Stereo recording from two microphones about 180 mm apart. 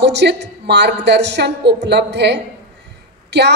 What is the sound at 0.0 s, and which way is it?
A woman's voice, 70° right (ahead or behind).